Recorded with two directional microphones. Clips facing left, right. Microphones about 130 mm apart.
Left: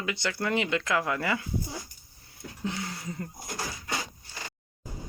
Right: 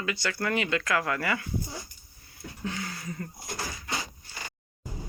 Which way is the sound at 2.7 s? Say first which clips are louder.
Left 1 dB; 20° left (ahead or behind).